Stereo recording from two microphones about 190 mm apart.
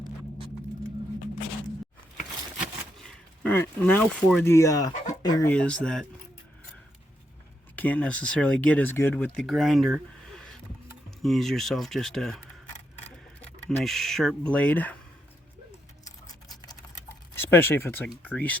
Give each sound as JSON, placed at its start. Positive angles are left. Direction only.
{"t": 3.1, "sound": "speech", "side_deg": 10}
{"t": 4.5, "sound": "speech", "side_deg": 15}
{"t": 5.5, "sound": "speech", "side_deg": 5}
{"t": 7.8, "sound": "speech", "side_deg": 5}
{"t": 13.4, "sound": "speech", "side_deg": 0}
{"t": 16.0, "sound": "a sound", "side_deg": 20}
{"t": 17.3, "sound": "speech", "side_deg": 10}